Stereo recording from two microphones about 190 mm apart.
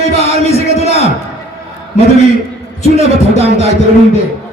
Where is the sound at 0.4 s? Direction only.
35° left (ahead or behind).